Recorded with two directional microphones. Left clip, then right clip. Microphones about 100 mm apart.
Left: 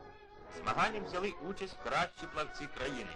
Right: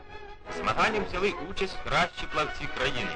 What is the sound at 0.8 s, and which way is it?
A man's voice, 30° left (ahead or behind).